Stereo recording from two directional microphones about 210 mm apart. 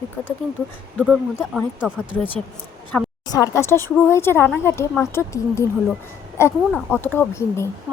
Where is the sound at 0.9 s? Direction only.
Centre (ahead or behind).